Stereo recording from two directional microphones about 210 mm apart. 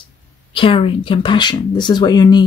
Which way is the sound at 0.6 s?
25° left (ahead or behind).